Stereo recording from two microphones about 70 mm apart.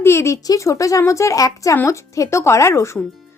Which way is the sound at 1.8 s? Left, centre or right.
Left.